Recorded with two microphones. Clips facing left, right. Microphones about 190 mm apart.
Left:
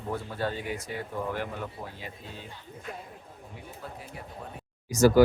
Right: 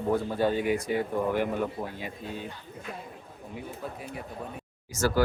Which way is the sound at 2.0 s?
15° right (ahead or behind).